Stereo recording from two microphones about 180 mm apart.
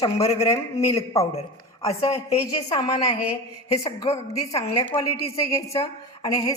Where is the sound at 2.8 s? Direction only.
20° left (ahead or behind).